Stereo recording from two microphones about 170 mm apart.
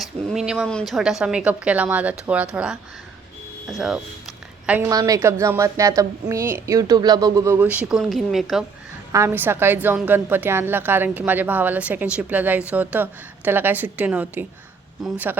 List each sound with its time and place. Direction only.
0.0 s a woman's voice: centre (ahead or behind)
4.9 s a woman's voice: 20° right (ahead or behind); by 8.6 s centre (ahead or behind)
9.1 s a woman's voice: 15° right (ahead or behind)